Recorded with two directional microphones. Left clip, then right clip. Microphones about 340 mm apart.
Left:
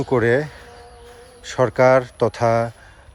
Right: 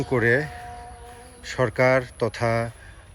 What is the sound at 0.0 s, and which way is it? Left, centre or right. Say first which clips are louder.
Speech: left 3 dB; centre.